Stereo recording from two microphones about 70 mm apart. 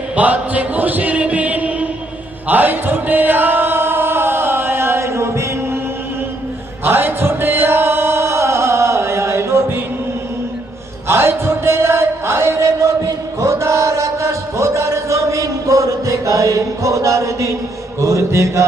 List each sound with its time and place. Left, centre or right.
0.2 s chant: right
6.8 s chant: right
11.1 s chant: right
13.4 s a sound: right
18.0 s mantra: right